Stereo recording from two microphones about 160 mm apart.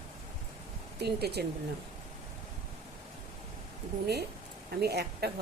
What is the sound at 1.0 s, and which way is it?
Speech, 90° right.